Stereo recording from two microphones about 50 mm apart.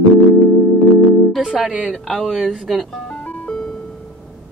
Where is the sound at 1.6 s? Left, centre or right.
Centre.